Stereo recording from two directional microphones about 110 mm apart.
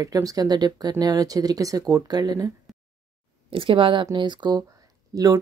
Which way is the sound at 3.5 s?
55° right (ahead or behind).